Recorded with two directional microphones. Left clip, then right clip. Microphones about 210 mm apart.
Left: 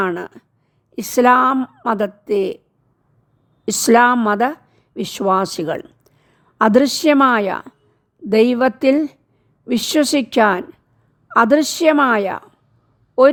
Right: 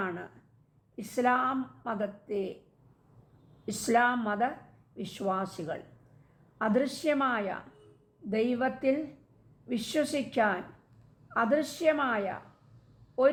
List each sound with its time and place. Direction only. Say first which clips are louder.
0.0 s a woman's voice: left 15 dB; 60° left (ahead or behind)
3.7 s a woman's voice: left 14 dB; 60° left (ahead or behind)